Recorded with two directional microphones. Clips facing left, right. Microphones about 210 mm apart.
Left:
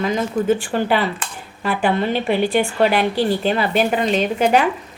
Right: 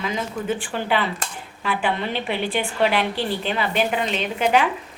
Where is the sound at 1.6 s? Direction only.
40° left (ahead or behind).